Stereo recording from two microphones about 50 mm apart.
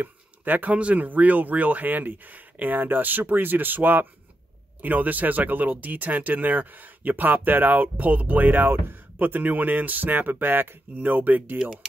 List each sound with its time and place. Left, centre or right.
0.0 s speech: right